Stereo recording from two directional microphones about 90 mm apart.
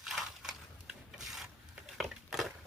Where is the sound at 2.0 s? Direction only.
Centre (ahead or behind).